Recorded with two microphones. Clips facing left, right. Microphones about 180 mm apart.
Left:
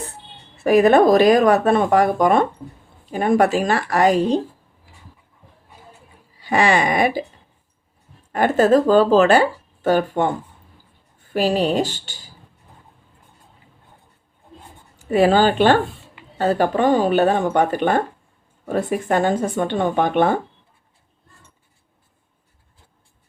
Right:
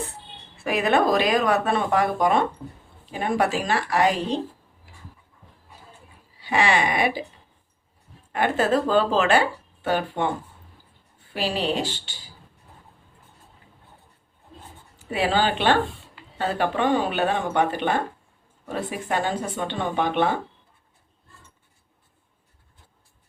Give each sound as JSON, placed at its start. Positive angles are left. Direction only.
{"t": 0.6, "sound": "speech", "side_deg": 40}
{"t": 6.4, "sound": "speech", "side_deg": 45}
{"t": 8.3, "sound": "speech", "side_deg": 40}
{"t": 11.3, "sound": "speech", "side_deg": 45}
{"t": 14.9, "sound": "speech", "side_deg": 45}